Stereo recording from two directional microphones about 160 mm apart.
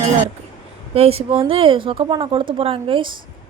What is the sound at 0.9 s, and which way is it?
Speech, 40° right (ahead or behind).